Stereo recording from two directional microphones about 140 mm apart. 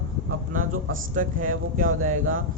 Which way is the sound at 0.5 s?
70° right (ahead or behind).